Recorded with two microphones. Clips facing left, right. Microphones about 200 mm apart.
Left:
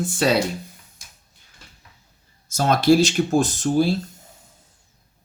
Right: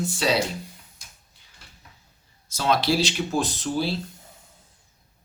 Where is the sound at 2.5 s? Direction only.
45° left (ahead or behind).